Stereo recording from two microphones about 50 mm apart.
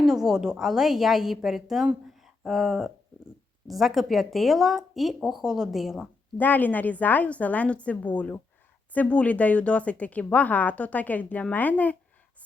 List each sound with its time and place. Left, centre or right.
0.0 s a woman's voice: centre
2.0 s a sound: centre
3.7 s a woman's voice: centre
5.4 s a woman's voice: centre
5.7 s a woman's voice: centre
6.3 s a woman's voice: left